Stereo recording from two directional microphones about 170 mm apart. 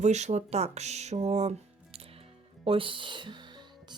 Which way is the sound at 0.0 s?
40° right (ahead or behind).